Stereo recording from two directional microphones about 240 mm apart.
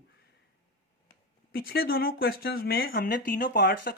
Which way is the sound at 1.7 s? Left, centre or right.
Left.